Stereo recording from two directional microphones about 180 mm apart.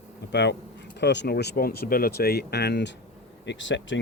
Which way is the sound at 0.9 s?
75° left (ahead or behind).